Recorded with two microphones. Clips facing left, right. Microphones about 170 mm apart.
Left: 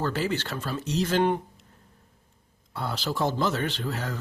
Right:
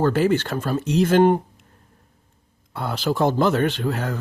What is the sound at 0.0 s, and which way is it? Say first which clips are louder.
Speech: right 9 dB; 50° right (ahead or behind).